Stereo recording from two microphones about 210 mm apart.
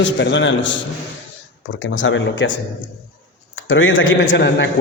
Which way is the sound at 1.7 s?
60° left (ahead or behind).